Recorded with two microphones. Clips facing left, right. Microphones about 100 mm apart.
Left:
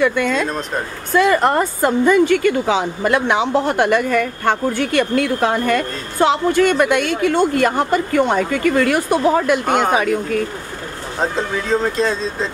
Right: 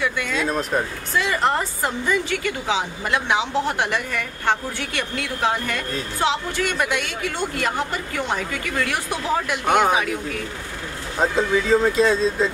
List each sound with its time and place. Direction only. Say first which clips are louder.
0.0 s a woman's voice: left 7 dB; 50° left (ahead or behind)
0.5 s speech: even; 5° right (ahead or behind)
1.1 s a woman's voice: left 7 dB; 50° left (ahead or behind)
9.7 s speech: left 1 dB; centre (ahead or behind)
11.1 s speech: right 1 dB; 5° right (ahead or behind)